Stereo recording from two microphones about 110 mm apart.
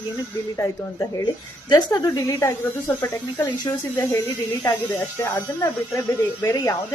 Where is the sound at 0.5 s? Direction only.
30° left (ahead or behind).